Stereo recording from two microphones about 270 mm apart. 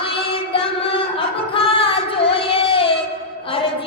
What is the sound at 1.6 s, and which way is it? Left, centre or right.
Singing, centre.